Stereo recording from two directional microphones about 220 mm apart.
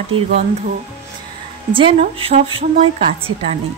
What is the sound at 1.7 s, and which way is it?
A woman's voice, 25° right (ahead or behind).